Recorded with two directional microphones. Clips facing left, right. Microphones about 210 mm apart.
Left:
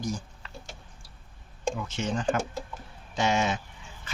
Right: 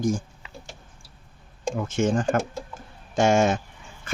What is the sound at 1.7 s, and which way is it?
Speech, 50° right (ahead or behind).